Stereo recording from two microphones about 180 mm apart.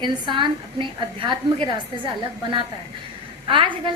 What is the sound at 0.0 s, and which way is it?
Speech, 25° right (ahead or behind).